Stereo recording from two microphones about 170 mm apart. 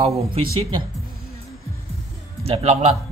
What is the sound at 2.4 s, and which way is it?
Speech, 40° right (ahead or behind).